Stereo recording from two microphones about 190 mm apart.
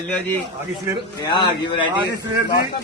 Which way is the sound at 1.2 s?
25° left (ahead or behind).